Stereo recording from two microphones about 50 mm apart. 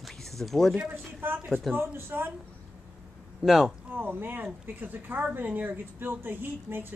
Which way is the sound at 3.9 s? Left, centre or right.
Right.